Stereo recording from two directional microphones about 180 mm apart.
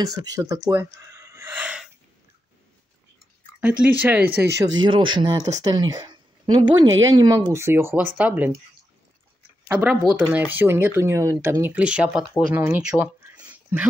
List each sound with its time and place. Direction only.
0.0 s speech: 20° right (ahead or behind)
3.6 s speech: 10° right (ahead or behind)
4.7 s speech: 25° right (ahead or behind); by 8.5 s 10° right (ahead or behind)
9.7 s speech: 10° right (ahead or behind)
12.6 s a sound: 10° right (ahead or behind)